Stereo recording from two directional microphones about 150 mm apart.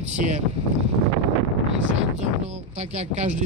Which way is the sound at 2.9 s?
50° right (ahead or behind).